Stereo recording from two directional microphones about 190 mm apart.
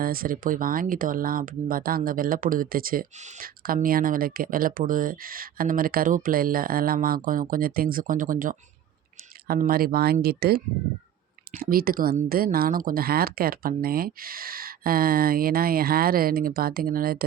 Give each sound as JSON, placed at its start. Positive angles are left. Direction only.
{"t": 0.0, "sound": "speech", "side_deg": -50}
{"t": 11.6, "sound": "speech", "side_deg": -50}